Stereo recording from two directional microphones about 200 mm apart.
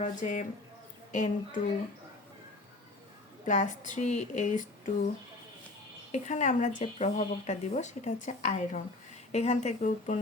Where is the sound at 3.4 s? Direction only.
40° left (ahead or behind).